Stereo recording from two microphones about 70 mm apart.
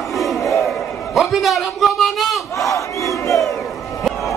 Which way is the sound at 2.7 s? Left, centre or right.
Left.